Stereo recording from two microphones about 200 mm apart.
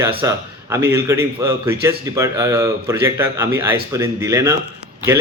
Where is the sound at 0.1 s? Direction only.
25° right (ahead or behind).